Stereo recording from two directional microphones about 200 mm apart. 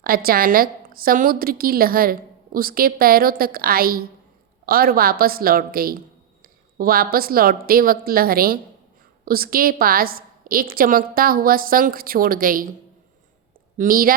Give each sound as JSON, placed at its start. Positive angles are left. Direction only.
{"t": 0.0, "sound": "a woman's voice", "side_deg": -50}
{"t": 13.7, "sound": "a woman's voice", "side_deg": -45}